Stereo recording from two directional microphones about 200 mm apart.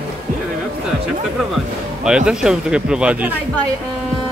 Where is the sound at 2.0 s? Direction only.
5° right (ahead or behind).